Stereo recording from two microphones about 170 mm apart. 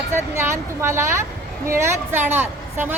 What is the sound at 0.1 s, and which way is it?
A woman's voice, 15° right (ahead or behind).